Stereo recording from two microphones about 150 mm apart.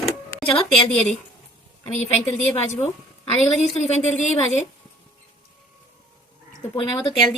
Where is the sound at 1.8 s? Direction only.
50° left (ahead or behind).